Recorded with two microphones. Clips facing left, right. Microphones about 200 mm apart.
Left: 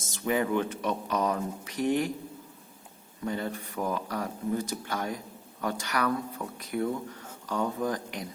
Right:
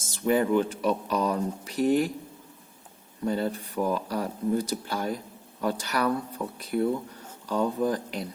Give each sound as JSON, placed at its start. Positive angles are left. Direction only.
{"t": 0.1, "sound": "speech", "side_deg": -35}
{"t": 3.2, "sound": "speech", "side_deg": -35}